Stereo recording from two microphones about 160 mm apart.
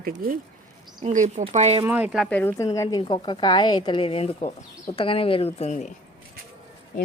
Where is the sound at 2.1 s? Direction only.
Centre (ahead or behind).